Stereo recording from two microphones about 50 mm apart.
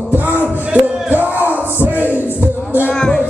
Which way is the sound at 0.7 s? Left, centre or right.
Right.